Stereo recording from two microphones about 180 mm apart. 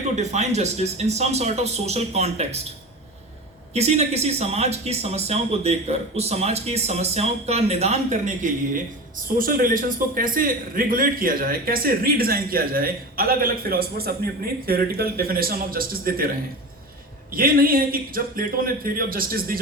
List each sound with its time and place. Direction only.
0.2 s speech: 40° right (ahead or behind)
3.8 s a man's voice: 35° right (ahead or behind); by 16.3 s 55° right (ahead or behind)
17.3 s a man's voice: 55° right (ahead or behind)